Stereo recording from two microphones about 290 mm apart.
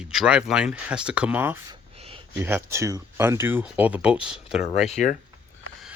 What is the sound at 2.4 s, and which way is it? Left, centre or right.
Speech, centre.